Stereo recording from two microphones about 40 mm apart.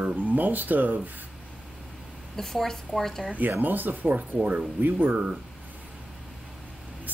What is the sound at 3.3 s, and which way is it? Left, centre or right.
Speech, right.